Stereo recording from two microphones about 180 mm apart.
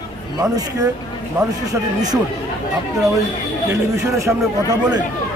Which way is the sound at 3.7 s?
15° right (ahead or behind).